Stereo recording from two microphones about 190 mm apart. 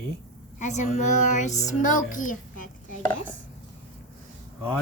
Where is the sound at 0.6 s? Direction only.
40° left (ahead or behind).